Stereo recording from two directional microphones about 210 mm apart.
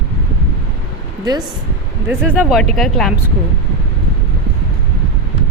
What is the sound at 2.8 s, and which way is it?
Speech, centre (ahead or behind).